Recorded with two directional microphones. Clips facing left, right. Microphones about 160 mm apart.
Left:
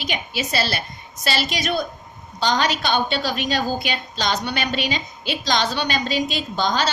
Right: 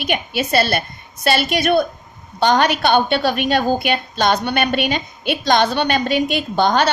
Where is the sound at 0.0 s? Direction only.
55° right (ahead or behind).